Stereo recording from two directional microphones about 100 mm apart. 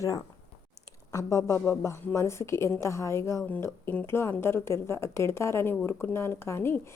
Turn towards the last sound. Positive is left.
turn(degrees=25)  # may be behind; listen again after turning